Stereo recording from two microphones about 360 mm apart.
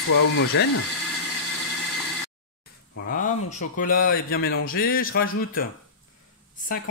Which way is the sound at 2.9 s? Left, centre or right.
Left.